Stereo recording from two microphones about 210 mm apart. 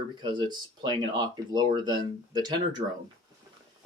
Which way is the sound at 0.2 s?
20° right (ahead or behind).